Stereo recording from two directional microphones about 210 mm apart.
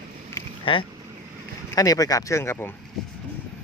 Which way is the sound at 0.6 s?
25° left (ahead or behind).